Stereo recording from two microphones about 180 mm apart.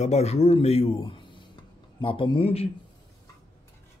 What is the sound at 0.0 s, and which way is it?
A man's voice, 35° left (ahead or behind).